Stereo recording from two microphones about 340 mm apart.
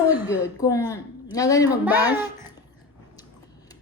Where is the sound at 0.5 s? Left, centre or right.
Centre.